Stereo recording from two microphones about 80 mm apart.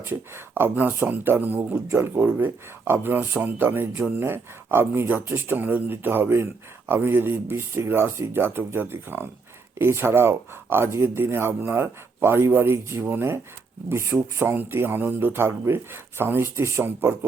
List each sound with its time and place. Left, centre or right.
0.0 s speech: right